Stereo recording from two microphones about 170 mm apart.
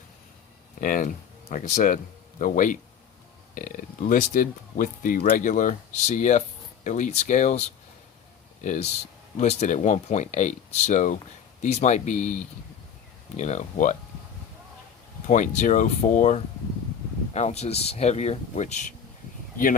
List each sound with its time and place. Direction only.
0.8 s speech: 55° left (ahead or behind)
8.6 s speech: 45° left (ahead or behind)
15.3 s speech: 45° left (ahead or behind)